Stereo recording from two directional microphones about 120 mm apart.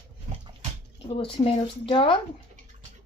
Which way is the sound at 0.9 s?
50° left (ahead or behind).